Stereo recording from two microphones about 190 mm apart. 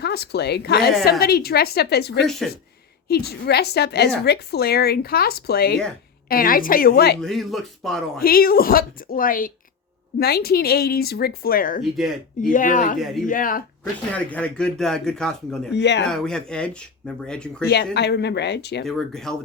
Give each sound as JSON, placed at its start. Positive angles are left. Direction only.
{"t": 0.0, "sound": "a woman's voice", "side_deg": 60}
{"t": 7.2, "sound": "speech", "side_deg": 0}
{"t": 8.2, "sound": "a woman's voice", "side_deg": 50}
{"t": 11.8, "sound": "speech", "side_deg": 0}
{"t": 12.5, "sound": "speech", "side_deg": 45}
{"t": 14.1, "sound": "speech", "side_deg": 5}
{"t": 15.7, "sound": "a woman's voice", "side_deg": 65}
{"t": 16.0, "sound": "speech", "side_deg": 5}
{"t": 17.6, "sound": "a woman's voice", "side_deg": 60}
{"t": 18.9, "sound": "speech", "side_deg": 0}